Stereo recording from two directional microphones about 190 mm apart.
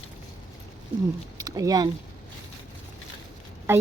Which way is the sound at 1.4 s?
20° right (ahead or behind).